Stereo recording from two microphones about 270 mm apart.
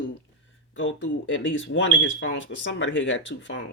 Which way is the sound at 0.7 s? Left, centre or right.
Left.